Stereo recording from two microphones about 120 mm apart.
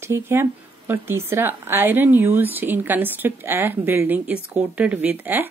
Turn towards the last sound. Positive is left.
turn(degrees=-15)  # may be behind; listen again after turning